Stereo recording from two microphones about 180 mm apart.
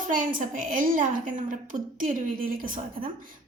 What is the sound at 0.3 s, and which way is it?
A woman's voice, 50° right (ahead or behind).